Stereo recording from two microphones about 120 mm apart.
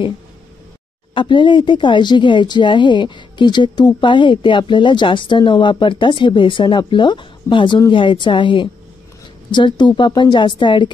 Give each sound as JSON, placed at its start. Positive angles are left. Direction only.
{"t": 1.1, "sound": "speech", "side_deg": 40}